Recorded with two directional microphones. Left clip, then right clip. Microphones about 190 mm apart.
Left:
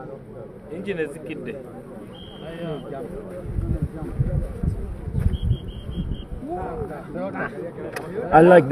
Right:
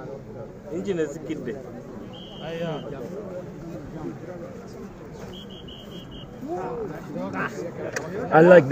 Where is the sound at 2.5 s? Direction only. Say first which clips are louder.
Right 2 dB; 25° right (ahead or behind).